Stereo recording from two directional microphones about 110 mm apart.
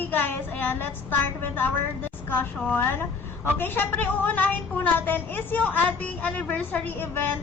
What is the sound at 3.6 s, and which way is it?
A woman's voice, 20° left (ahead or behind).